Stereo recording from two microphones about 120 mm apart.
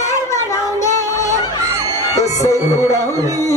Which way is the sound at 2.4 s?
25° left (ahead or behind).